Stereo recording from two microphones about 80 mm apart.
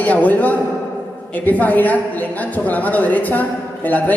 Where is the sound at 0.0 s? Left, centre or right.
Centre.